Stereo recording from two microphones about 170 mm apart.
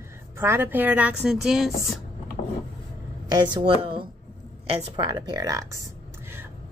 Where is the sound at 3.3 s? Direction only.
25° right (ahead or behind).